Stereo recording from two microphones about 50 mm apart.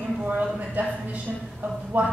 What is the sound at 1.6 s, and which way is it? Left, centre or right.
Speech, right.